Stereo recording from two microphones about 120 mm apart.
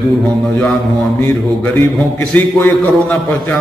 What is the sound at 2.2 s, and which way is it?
A man's voice, 20° left (ahead or behind).